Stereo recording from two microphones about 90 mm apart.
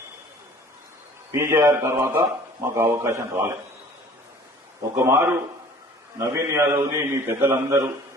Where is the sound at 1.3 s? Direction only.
30° right (ahead or behind).